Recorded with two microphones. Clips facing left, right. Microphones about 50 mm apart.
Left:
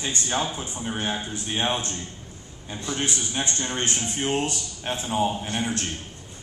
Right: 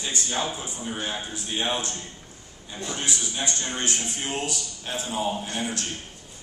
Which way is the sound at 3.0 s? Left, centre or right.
Left.